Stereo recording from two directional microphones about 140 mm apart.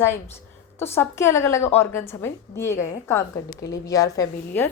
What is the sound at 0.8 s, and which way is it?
A woman's voice, 15° left (ahead or behind).